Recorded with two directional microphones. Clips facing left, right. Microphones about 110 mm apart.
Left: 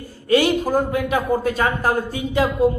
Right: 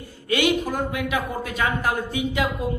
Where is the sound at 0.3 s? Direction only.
35° left (ahead or behind).